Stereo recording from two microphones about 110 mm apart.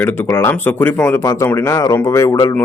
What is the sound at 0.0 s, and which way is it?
Speech, 20° left (ahead or behind).